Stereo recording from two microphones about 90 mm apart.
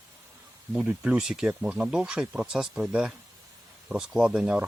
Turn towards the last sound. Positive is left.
turn(degrees=-10)  # may be behind; listen again after turning